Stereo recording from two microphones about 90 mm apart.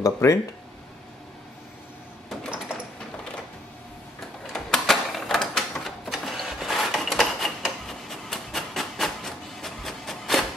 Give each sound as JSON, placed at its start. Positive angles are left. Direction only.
{"t": 0.0, "sound": "speech", "side_deg": 35}
{"t": 4.5, "sound": "typewriter", "side_deg": 5}